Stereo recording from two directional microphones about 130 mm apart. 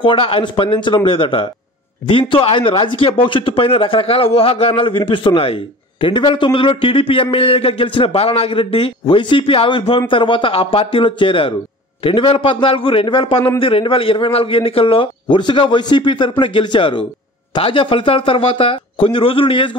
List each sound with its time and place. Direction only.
0.0 s a man's voice: 40° left (ahead or behind)